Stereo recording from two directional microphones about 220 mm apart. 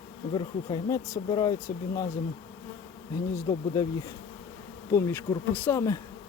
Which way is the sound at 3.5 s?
15° left (ahead or behind).